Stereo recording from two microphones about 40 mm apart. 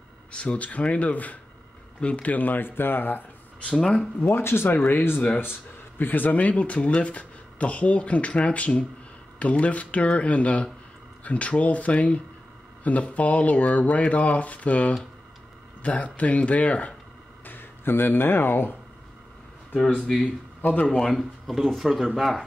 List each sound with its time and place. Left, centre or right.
0.3 s speech: left
2.0 s speech: left
2.3 s speech: left
2.6 s speech: left
4.2 s speech: left
4.7 s speech: left
6.3 s speech: left
17.5 s speech: left
20.1 s speech: centre
21.1 s speech: centre